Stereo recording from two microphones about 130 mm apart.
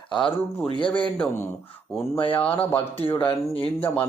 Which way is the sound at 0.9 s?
10° left (ahead or behind).